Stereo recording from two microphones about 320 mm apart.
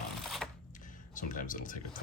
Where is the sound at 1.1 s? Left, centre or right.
Left.